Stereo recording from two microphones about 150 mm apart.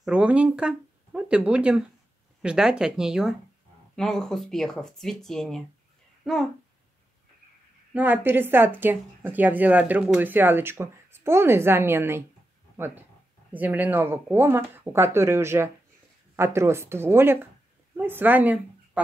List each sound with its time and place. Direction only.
0.0 s a child's voice: 10° right (ahead or behind)
7.9 s a woman's voice: 10° right (ahead or behind)